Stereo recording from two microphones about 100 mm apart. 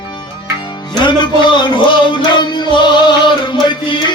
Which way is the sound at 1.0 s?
50° left (ahead or behind).